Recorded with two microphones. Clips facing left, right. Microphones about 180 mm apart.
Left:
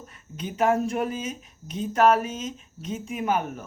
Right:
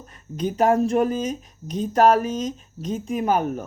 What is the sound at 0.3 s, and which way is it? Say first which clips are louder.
Speech: right 4 dB; 40° right (ahead or behind).